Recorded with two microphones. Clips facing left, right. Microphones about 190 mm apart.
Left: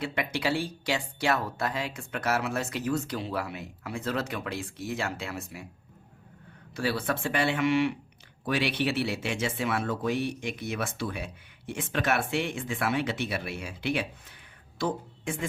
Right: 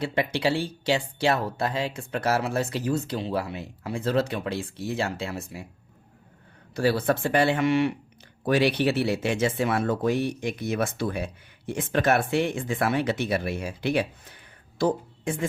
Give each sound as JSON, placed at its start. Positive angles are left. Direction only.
{"t": 0.0, "sound": "speech", "side_deg": -30}
{"t": 6.7, "sound": "speech", "side_deg": -40}